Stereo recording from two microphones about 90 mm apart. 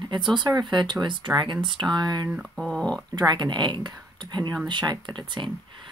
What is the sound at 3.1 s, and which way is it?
Speech, 55° right (ahead or behind).